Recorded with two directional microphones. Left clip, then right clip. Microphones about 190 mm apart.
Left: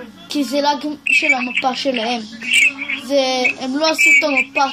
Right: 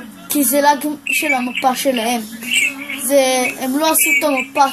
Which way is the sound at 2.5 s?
45° left (ahead or behind).